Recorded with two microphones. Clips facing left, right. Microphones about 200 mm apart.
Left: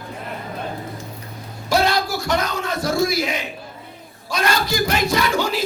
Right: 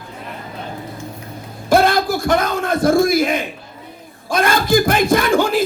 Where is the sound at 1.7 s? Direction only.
50° right (ahead or behind).